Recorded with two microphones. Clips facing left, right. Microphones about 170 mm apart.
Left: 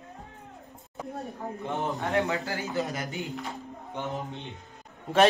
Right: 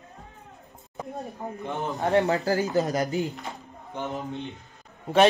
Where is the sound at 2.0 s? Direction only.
40° right (ahead or behind).